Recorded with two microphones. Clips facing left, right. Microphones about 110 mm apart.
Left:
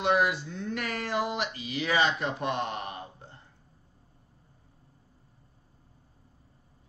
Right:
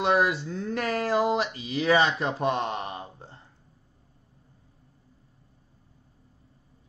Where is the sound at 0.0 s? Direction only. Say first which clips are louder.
Right 2 dB; 35° right (ahead or behind).